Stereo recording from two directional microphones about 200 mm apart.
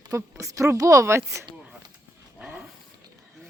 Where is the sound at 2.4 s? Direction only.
5° right (ahead or behind).